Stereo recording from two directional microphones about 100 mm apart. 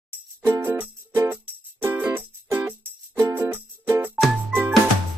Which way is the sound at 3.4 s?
25° right (ahead or behind).